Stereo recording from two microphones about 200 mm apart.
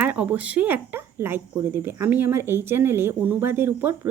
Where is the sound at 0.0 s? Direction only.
10° right (ahead or behind).